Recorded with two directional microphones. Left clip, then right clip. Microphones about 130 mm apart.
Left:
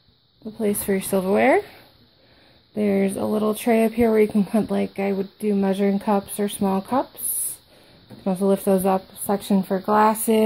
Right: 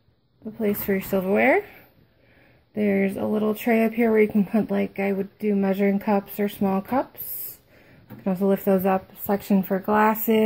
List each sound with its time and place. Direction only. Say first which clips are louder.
0.6 s speech: left 2 dB; 30° left (ahead or behind)
2.7 s speech: left 1 dB; 25° left (ahead or behind)
3.1 s speech: left 2 dB; 35° left (ahead or behind)
3.6 s speech: left 3 dB; 20° left (ahead or behind)
8.2 s speech: left 2 dB; 25° left (ahead or behind)